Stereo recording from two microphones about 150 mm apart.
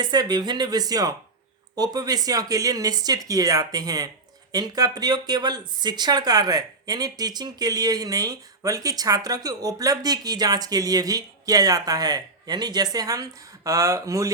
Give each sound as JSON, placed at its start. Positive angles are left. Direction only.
{"t": 0.0, "sound": "speech", "side_deg": -30}